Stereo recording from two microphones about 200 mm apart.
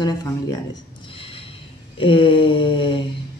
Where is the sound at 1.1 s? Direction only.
25° left (ahead or behind).